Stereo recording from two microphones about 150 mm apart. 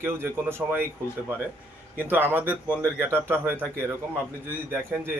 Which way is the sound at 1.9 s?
15° right (ahead or behind).